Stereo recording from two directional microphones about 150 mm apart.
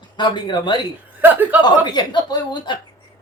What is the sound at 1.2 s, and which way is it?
Speech, 10° right (ahead or behind).